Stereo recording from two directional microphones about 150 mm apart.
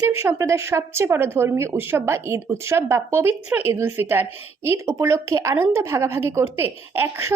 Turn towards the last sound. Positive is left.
turn(degrees=-15)  # may be behind; listen again after turning